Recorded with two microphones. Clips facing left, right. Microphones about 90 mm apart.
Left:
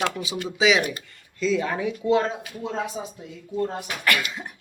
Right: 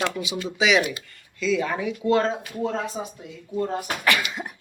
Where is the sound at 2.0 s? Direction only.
15° left (ahead or behind).